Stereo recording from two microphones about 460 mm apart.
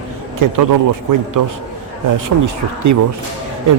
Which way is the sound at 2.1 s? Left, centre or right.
Right.